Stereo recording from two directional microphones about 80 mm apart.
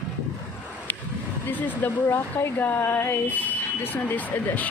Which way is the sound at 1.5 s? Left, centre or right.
Left.